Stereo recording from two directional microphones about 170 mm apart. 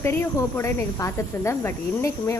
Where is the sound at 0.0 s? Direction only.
15° left (ahead or behind).